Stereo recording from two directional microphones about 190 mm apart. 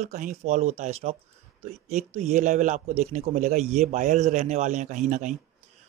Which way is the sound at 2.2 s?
35° right (ahead or behind).